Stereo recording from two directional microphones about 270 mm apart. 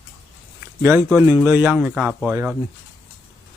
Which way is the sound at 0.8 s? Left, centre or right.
Centre.